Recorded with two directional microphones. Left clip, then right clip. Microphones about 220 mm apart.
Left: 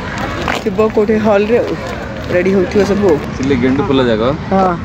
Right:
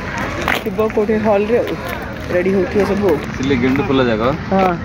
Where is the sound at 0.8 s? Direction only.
5° left (ahead or behind).